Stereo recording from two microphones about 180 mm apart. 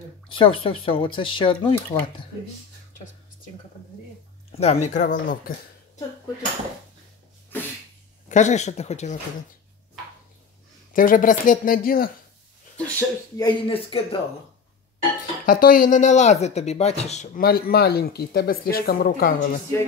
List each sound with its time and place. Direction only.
0.3 s speech: 30° left (ahead or behind)
4.6 s speech: 40° left (ahead or behind)
8.3 s speech: 40° left (ahead or behind)
10.9 s speech: 50° left (ahead or behind)
12.7 s a sound: 5° left (ahead or behind)
13.4 s speech: 25° left (ahead or behind)
15.4 s speech: 50° left (ahead or behind)
17.4 s speech: 55° left (ahead or behind)